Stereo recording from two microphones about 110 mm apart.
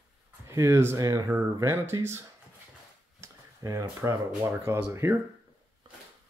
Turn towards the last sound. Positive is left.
turn(degrees=-25)  # may be behind; listen again after turning